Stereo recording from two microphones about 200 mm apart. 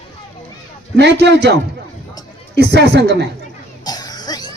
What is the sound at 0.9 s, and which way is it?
A man's voice, 55° right (ahead or behind).